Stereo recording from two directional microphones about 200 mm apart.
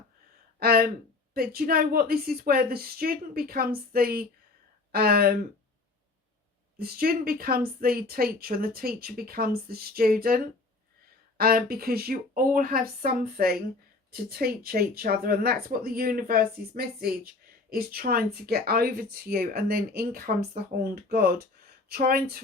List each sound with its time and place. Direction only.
0.6 s a sound: 50° right (ahead or behind)
1.3 s speech: 50° right (ahead or behind)
6.7 s speech: 50° right (ahead or behind)